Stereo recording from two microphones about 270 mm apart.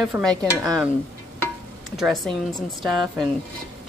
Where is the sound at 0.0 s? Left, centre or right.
Centre.